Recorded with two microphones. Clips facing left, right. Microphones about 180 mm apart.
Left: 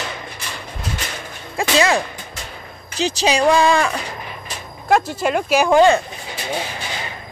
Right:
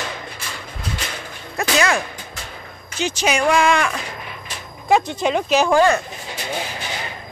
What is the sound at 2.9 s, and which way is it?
Speech, 35° left (ahead or behind).